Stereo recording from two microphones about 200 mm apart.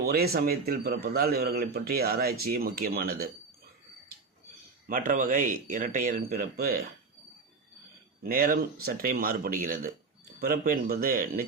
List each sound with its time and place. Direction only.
0.0 s a man's voice: 50° right (ahead or behind)
4.9 s a man's voice: 45° right (ahead or behind)
8.2 s a man's voice: 45° right (ahead or behind)